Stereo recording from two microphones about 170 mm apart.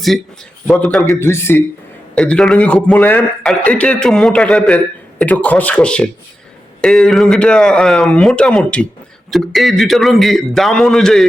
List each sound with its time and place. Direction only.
0.7 s speech: 5° left (ahead or behind)
1.0 s a man's voice: 15° left (ahead or behind)